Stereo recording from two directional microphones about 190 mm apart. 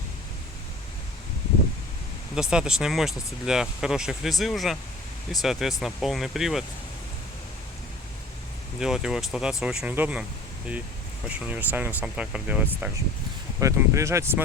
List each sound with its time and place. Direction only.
2.3 s speech: 5° right (ahead or behind)
8.8 s speech: 5° right (ahead or behind)
11.3 s speech: 5° right (ahead or behind)